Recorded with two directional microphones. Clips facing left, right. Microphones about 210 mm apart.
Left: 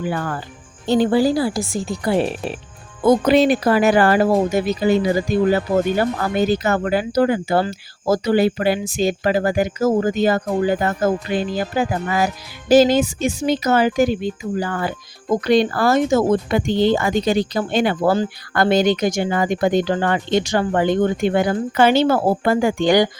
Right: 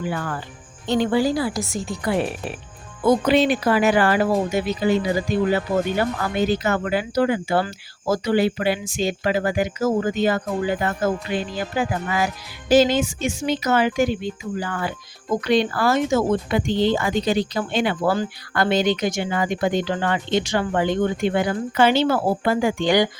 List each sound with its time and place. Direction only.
0.1 s speech: 40° left (ahead or behind)
3.0 s speech: 45° left (ahead or behind)